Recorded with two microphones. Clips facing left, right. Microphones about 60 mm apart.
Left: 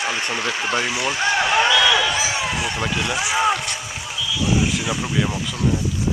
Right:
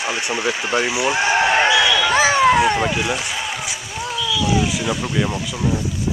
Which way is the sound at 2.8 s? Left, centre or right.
Centre.